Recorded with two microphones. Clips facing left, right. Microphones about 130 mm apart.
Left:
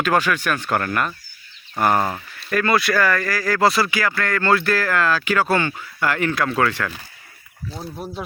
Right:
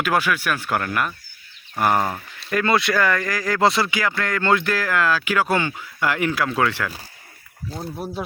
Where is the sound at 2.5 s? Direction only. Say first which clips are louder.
Left 1 dB; 20° right (ahead or behind); by 8.2 s 5° right (ahead or behind).